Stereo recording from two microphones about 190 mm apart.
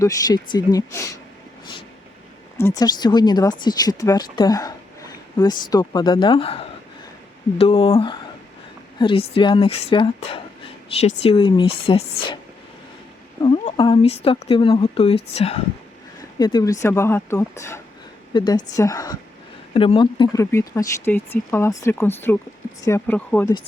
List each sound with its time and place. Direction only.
0.0 s speech: 20° left (ahead or behind)
2.6 s speech: 15° left (ahead or behind)
13.4 s speech: 20° left (ahead or behind)
16.4 s speech: 20° left (ahead or behind)